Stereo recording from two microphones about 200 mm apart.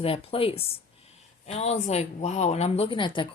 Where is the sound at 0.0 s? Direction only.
30° left (ahead or behind).